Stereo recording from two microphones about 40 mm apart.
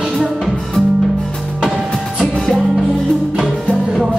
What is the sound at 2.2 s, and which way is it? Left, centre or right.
Music, centre.